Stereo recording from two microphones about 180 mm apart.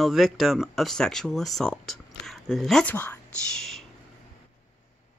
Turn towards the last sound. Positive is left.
turn(degrees=0)  # may be behind; listen again after turning